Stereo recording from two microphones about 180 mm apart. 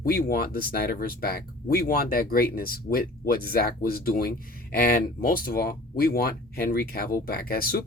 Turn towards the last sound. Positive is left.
turn(degrees=55)  # may be behind; listen again after turning